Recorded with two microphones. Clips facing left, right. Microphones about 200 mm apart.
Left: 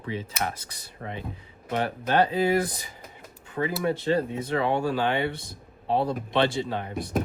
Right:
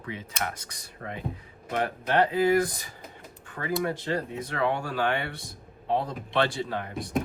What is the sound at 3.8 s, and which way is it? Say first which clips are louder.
Speech: left 6 dB; 25° left (ahead or behind).